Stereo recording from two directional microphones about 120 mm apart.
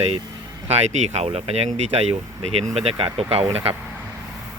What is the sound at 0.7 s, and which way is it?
Speech, 65° right (ahead or behind).